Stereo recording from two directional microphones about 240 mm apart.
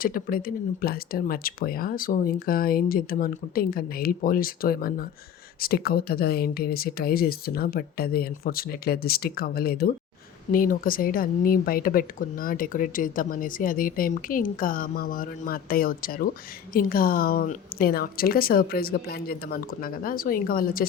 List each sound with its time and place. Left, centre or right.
0.0 s speech: left